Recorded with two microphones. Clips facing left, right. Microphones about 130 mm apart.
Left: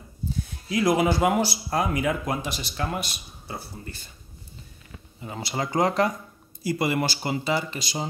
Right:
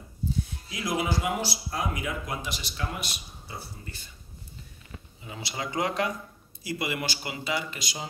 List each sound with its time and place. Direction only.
0.7 s speech: 55° left (ahead or behind)
5.2 s speech: 45° left (ahead or behind); by 8.1 s 30° left (ahead or behind)